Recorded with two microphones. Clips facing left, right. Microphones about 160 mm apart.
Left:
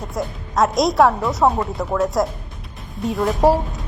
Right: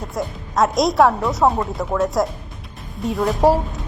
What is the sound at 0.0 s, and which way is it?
A woman's voice, centre (ahead or behind).